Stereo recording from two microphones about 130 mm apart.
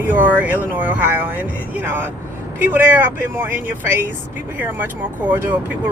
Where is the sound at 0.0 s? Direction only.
10° right (ahead or behind).